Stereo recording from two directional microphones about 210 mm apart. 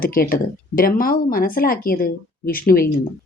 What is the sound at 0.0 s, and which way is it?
Speech, 45° left (ahead or behind).